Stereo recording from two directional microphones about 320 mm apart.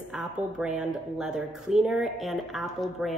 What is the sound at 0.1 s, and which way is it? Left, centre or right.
A woman's voice, centre.